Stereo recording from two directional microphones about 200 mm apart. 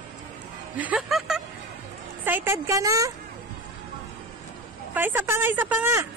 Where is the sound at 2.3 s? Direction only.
10° right (ahead or behind).